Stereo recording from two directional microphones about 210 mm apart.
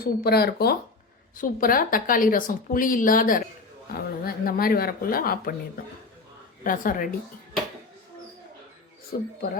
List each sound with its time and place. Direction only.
0.0 s a woman's voice: 50° left (ahead or behind)
6.7 s a woman's voice: 40° left (ahead or behind)
9.1 s speech: 50° left (ahead or behind)